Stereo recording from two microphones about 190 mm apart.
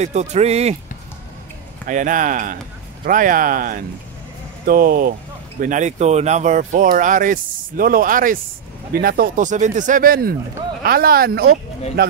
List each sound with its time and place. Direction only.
0.0 s speech: 35° right (ahead or behind)
1.9 s speech: 45° right (ahead or behind)